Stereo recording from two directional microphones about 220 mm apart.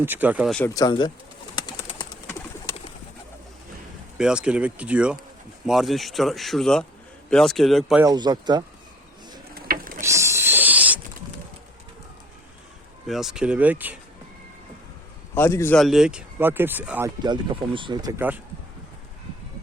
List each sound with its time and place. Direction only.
0.0 s speech: 10° right (ahead or behind)
0.5 s speech: 10° left (ahead or behind)
1.5 s bird: 20° left (ahead or behind)
4.2 s speech: 5° right (ahead or behind)
8.0 s speech: 20° right (ahead or behind)
9.6 s mechanisms: 40° right (ahead or behind)
10.0 s owl: 15° right (ahead or behind)
13.1 s speech: centre (ahead or behind)
15.4 s speech: 10° left (ahead or behind); by 17.1 s 10° right (ahead or behind)
17.2 s speech: 20° right (ahead or behind)